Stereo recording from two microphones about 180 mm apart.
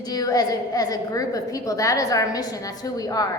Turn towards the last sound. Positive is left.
turn(degrees=20)  # may be behind; listen again after turning